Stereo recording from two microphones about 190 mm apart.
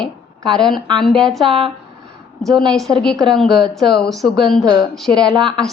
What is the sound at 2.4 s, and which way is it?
A woman's voice, centre (ahead or behind).